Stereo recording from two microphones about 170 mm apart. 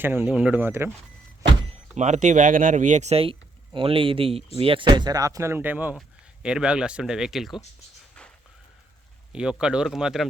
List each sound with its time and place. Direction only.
0.0 s speech: 10° right (ahead or behind)
1.4 s vehicle: 30° right (ahead or behind)
2.0 s speech: 45° right (ahead or behind); by 7.6 s centre (ahead or behind)
9.3 s speech: 5° right (ahead or behind)